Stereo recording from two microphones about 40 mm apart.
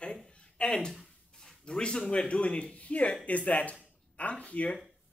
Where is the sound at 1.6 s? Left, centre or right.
Left.